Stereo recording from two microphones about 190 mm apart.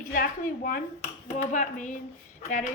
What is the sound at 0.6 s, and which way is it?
A woman's voice, 40° left (ahead or behind).